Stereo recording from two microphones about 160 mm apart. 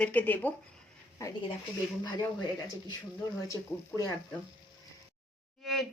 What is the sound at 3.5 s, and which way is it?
Speech, 20° left (ahead or behind).